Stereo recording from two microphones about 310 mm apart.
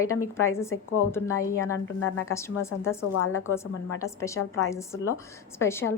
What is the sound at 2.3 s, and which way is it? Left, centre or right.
Speech, centre.